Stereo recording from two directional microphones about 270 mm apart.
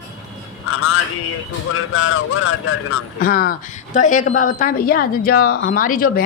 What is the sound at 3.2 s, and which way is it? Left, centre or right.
A woman's voice, left.